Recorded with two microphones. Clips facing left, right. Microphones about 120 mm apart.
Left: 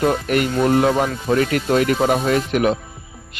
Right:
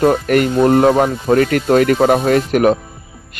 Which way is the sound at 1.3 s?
50° right (ahead or behind).